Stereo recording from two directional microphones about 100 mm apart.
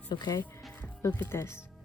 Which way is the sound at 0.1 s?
45° left (ahead or behind).